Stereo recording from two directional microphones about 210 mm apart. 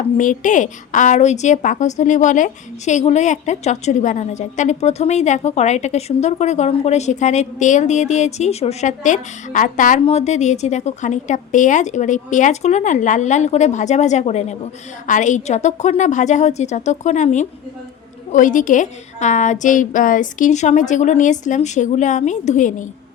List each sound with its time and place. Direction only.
0.2 s a woman's voice: 35° left (ahead or behind)